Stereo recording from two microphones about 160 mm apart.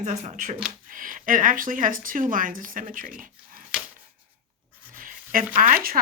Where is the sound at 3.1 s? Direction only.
60° right (ahead or behind).